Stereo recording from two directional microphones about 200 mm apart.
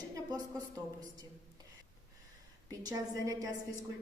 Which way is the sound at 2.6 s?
15° right (ahead or behind).